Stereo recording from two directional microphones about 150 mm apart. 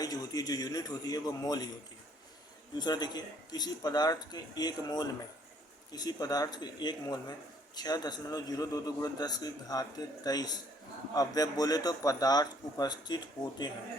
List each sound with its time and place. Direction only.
0.0 s a man's voice: 25° left (ahead or behind)
2.7 s a man's voice: 30° left (ahead or behind)